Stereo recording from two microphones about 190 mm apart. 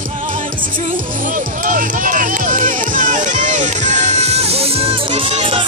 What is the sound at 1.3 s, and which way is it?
Music, 45° right (ahead or behind).